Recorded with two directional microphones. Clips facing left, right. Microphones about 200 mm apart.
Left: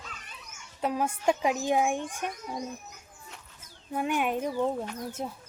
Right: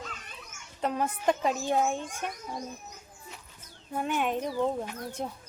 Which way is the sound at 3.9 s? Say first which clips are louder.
Left 1 dB; 10° left (ahead or behind).